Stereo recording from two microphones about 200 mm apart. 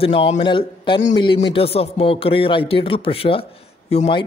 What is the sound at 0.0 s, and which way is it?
Speech, 30° left (ahead or behind).